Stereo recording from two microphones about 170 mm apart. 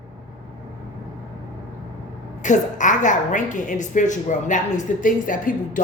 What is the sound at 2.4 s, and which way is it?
Speech, 45° left (ahead or behind).